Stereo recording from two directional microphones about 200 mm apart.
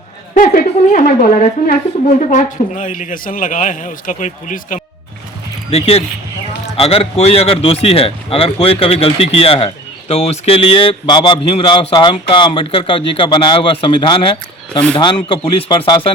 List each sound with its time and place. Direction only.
0.3 s a man's voice: 40° left (ahead or behind)